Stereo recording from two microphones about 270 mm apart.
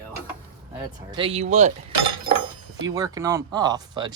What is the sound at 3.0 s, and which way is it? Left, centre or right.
Speech, centre.